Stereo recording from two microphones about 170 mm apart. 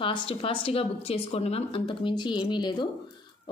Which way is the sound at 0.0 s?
30° left (ahead or behind).